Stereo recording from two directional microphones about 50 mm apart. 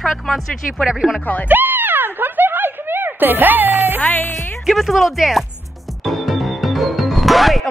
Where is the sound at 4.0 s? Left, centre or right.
Left.